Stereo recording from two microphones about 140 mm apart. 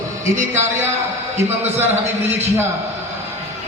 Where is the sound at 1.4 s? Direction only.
15° right (ahead or behind).